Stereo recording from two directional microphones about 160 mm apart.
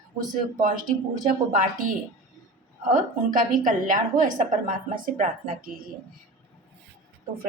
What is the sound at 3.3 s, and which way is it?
A woman's voice, 55° right (ahead or behind).